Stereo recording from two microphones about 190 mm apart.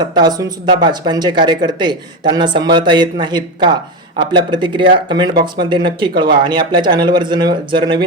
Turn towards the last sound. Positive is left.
turn(degrees=-25)  # may be behind; listen again after turning